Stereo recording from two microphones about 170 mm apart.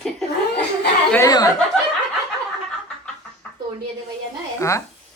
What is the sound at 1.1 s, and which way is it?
Speech, 20° left (ahead or behind).